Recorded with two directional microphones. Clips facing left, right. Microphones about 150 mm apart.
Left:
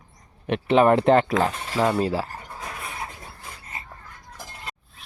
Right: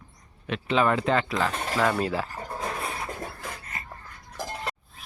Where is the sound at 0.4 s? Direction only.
55° left (ahead or behind).